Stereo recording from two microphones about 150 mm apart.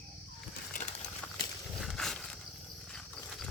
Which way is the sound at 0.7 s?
60° left (ahead or behind).